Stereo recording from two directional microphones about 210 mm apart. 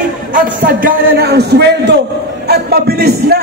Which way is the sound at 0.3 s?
40° right (ahead or behind).